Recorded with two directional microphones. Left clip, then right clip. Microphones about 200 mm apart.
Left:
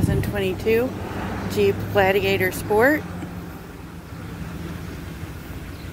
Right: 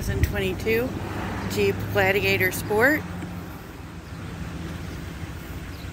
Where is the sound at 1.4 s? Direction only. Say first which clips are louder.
Left 4 dB; 30° left (ahead or behind).